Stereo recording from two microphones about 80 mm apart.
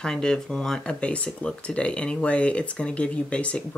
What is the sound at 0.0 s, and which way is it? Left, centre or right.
Speech, centre.